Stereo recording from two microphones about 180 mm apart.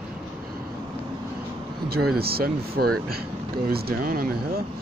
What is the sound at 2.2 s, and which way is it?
Speech, 55° right (ahead or behind).